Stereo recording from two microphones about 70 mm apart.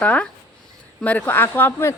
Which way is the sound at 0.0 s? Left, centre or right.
Centre.